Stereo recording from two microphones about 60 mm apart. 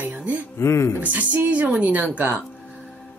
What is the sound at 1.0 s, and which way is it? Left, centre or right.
Speech, right.